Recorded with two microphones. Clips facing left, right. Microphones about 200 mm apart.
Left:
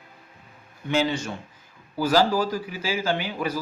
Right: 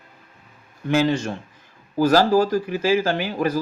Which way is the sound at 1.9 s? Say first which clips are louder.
Right 5 dB; 45° right (ahead or behind).